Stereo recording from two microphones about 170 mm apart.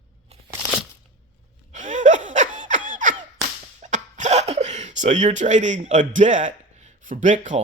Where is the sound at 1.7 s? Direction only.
45° right (ahead or behind).